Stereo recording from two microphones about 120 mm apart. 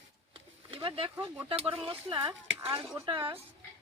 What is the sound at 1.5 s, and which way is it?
Speech, 50° right (ahead or behind).